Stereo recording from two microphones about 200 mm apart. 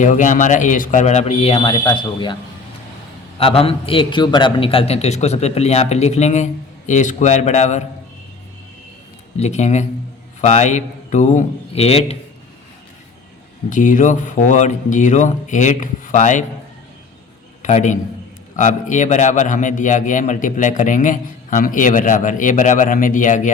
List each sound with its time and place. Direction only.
0.0 s a man's voice: 40° left (ahead or behind)
9.4 s a man's voice: 35° left (ahead or behind)
13.7 s a man's voice: 40° left (ahead or behind)
17.6 s a man's voice: 35° left (ahead or behind)